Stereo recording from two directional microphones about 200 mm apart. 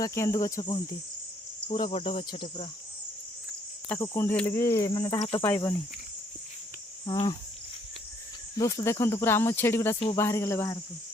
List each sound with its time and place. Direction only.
0.0 s speech: 15° left (ahead or behind)
1.6 s cricket: 25° left (ahead or behind)
3.8 s speech: 10° left (ahead or behind)
5.2 s cricket: 25° left (ahead or behind)
5.5 s speech: 15° left (ahead or behind)
8.5 s speech: 15° left (ahead or behind)